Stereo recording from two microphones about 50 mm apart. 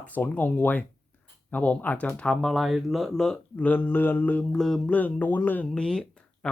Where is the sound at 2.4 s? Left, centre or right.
Centre.